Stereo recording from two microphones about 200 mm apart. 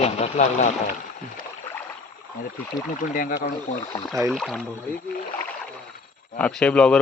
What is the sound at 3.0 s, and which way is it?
Speech, 45° left (ahead or behind).